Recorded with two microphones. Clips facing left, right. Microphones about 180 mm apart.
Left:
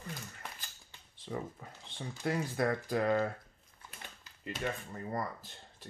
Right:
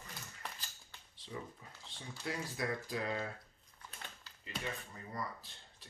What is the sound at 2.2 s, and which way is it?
Speech, 55° left (ahead or behind).